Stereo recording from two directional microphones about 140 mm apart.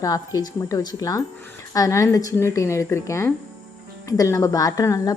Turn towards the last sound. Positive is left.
turn(degrees=25)  # may be behind; listen again after turning